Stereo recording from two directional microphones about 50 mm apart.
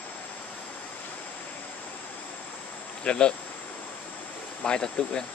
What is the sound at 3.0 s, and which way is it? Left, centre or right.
Speech, centre.